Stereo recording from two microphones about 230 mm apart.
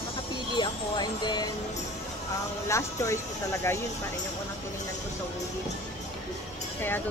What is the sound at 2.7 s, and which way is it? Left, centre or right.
A woman's voice, centre.